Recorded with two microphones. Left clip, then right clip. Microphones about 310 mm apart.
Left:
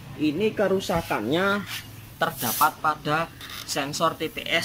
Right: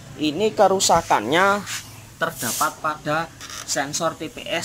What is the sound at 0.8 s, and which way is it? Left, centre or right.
Speech, right.